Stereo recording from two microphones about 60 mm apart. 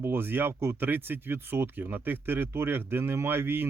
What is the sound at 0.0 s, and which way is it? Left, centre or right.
Speech, right.